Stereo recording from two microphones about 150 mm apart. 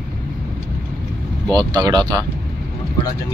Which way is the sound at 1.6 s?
30° right (ahead or behind).